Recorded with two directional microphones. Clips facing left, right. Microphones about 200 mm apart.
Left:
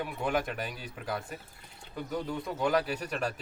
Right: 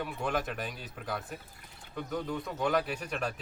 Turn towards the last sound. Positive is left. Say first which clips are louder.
# left 2 dB
turn(degrees=0)  # may be behind; listen again after turning